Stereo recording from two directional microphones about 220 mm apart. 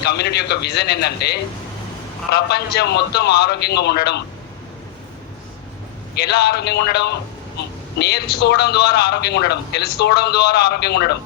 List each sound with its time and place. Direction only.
0.0 s a man's voice: 50° left (ahead or behind)
6.1 s a man's voice: 50° left (ahead or behind)